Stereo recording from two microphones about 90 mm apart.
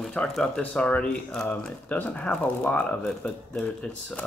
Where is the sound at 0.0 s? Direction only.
10° left (ahead or behind).